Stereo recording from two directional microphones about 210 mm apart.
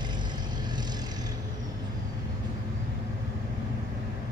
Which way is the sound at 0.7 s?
20° right (ahead or behind).